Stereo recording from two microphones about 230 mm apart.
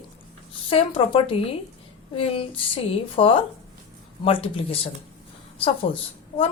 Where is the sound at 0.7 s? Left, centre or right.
Left.